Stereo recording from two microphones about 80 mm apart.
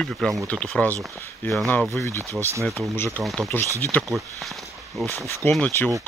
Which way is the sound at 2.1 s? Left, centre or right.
Right.